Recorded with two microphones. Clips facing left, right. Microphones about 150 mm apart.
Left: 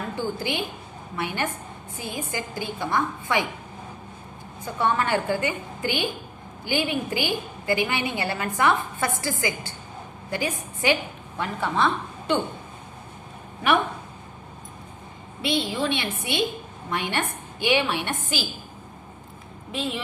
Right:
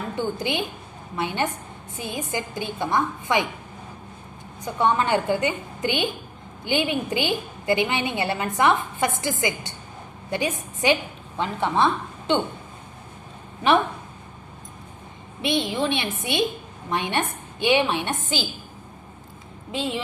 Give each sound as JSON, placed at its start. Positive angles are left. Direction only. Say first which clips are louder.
{"t": 0.2, "sound": "a woman's voice", "louder": "right 3 dB", "side_deg": -20}
{"t": 4.6, "sound": "a woman's voice", "louder": "right 2 dB", "side_deg": -20}
{"t": 13.6, "sound": "a woman's voice", "louder": "right 3 dB", "side_deg": -25}
{"t": 15.4, "sound": "a woman's voice", "louder": "right 2 dB", "side_deg": -20}
{"t": 19.7, "sound": "a woman's voice", "louder": "right 2 dB", "side_deg": -90}